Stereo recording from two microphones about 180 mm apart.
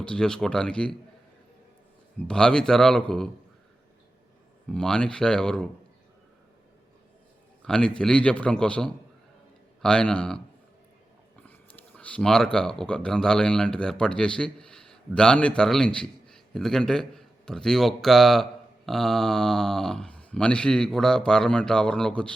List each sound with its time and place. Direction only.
0.0 s speech: 5° left (ahead or behind)
2.2 s speech: 5° left (ahead or behind)
4.7 s speech: 5° left (ahead or behind)
7.6 s speech: 5° left (ahead or behind)
11.4 s speech: 10° left (ahead or behind)